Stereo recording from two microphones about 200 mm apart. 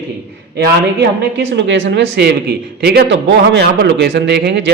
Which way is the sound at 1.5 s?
65° right (ahead or behind).